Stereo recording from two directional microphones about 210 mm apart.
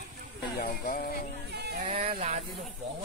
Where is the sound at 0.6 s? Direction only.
40° left (ahead or behind).